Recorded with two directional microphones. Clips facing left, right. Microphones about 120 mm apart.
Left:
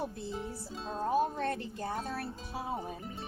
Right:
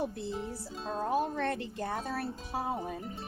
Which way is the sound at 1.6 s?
60° right (ahead or behind).